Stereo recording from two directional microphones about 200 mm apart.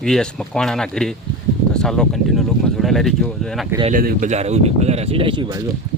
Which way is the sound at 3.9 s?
45° right (ahead or behind).